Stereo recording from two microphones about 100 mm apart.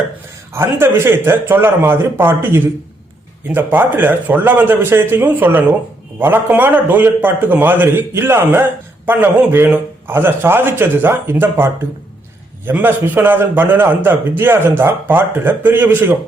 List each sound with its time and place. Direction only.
0.5 s a man's voice: 25° right (ahead or behind)